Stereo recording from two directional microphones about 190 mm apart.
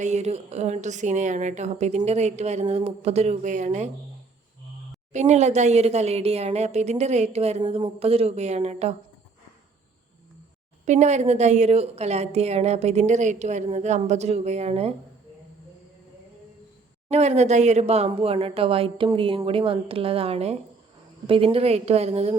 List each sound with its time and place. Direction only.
0.0 s a woman's voice: 35° right (ahead or behind)
5.1 s a woman's voice: 35° right (ahead or behind)
10.8 s a woman's voice: 35° right (ahead or behind)
17.1 s a woman's voice: 35° right (ahead or behind)